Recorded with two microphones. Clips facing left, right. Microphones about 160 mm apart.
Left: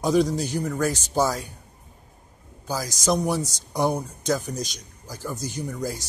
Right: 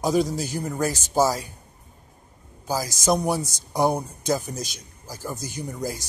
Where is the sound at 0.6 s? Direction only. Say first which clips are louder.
Even; 10° right (ahead or behind).